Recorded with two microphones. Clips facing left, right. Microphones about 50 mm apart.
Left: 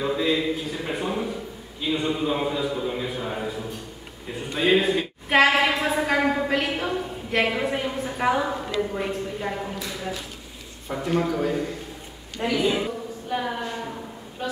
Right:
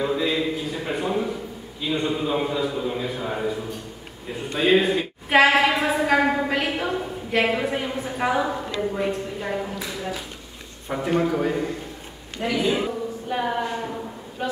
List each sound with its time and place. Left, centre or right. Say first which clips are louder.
0.0 s a sound: even; centre
1.8 s a woman's voice: even; centre
4.6 s a woman's voice: right 1 dB; centre
12.4 s a woman's voice: even; centre